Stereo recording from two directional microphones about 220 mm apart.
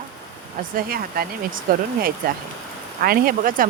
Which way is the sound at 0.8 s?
40° right (ahead or behind).